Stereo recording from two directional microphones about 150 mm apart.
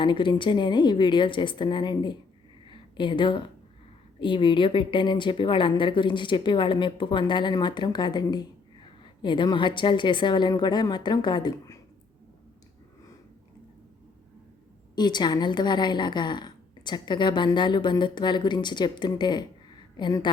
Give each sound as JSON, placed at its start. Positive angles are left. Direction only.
{"t": 0.0, "sound": "a woman's voice", "side_deg": 30}
{"t": 2.6, "sound": "a sound", "side_deg": 30}
{"t": 4.2, "sound": "a woman's voice", "side_deg": 35}
{"t": 14.9, "sound": "a woman's voice", "side_deg": 30}